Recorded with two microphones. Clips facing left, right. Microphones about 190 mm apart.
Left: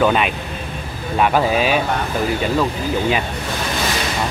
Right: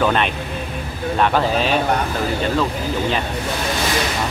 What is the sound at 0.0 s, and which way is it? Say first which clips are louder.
Speech: left 2 dB; 5° left (ahead or behind).